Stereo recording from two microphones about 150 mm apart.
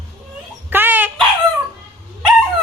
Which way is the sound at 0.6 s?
10° right (ahead or behind).